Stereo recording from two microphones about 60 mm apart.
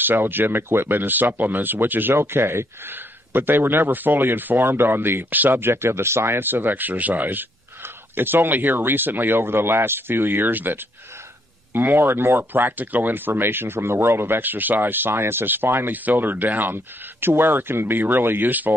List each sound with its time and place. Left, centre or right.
0.0 s speech: right